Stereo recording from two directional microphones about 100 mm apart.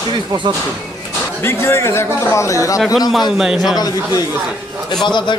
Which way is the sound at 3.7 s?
40° left (ahead or behind).